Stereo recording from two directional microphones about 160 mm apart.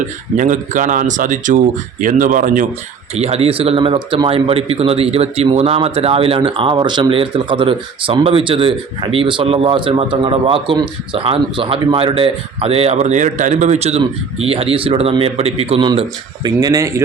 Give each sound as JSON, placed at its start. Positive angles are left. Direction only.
{"t": 0.3, "sound": "speech", "side_deg": -50}
{"t": 3.2, "sound": "speech", "side_deg": -40}
{"t": 16.0, "sound": "speech", "side_deg": -25}